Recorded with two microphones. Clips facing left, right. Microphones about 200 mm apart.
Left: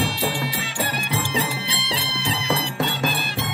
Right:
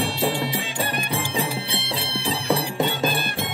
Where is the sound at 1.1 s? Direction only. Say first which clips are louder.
Even; 50° right (ahead or behind).